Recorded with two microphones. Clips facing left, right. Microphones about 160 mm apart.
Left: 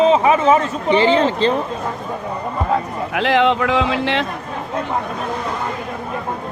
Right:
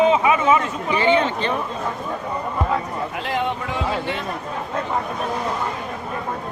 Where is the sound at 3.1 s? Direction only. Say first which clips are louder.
Left 11 dB; 85° left.